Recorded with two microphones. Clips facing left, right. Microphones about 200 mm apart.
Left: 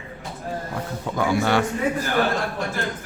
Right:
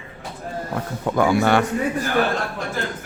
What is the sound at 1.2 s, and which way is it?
Speech, 55° right (ahead or behind).